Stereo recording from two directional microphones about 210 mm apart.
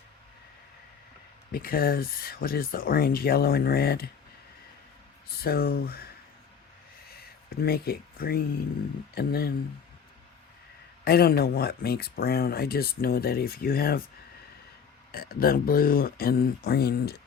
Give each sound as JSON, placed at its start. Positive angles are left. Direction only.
{"t": 1.5, "sound": "speech", "side_deg": 45}
{"t": 5.4, "sound": "speech", "side_deg": 45}
{"t": 7.2, "sound": "speech", "side_deg": 45}
{"t": 11.0, "sound": "speech", "side_deg": 45}
{"t": 15.1, "sound": "speech", "side_deg": 45}